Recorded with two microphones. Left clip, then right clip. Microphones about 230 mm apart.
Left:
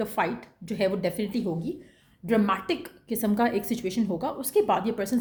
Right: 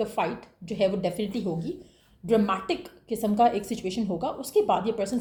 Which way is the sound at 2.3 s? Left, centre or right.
Left.